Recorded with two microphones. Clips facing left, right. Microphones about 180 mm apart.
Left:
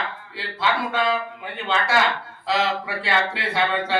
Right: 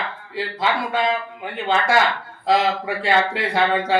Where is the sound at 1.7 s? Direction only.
45° right (ahead or behind).